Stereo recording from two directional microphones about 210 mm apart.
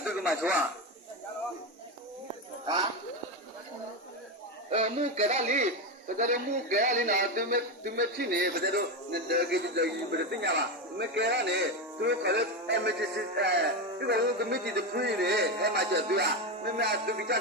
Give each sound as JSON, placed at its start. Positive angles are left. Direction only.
{"t": 0.0, "sound": "a sound", "side_deg": -5}
{"t": 4.7, "sound": "a man's voice", "side_deg": -30}
{"t": 10.9, "sound": "music", "side_deg": -55}
{"t": 12.0, "sound": "a man's voice", "side_deg": -55}